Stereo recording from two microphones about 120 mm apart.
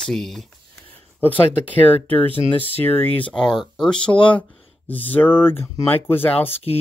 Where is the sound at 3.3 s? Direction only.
5° left (ahead or behind).